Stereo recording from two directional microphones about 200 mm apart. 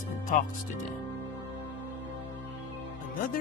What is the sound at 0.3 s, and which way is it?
Speech, 45° left (ahead or behind).